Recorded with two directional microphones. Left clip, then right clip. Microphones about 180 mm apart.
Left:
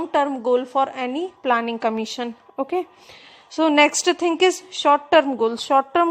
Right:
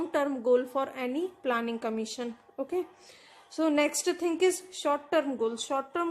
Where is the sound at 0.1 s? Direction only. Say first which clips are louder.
Left 7 dB; 10° left (ahead or behind).